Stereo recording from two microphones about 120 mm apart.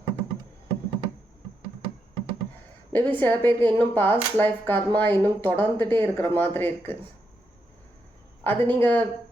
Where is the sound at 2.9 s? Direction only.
15° left (ahead or behind).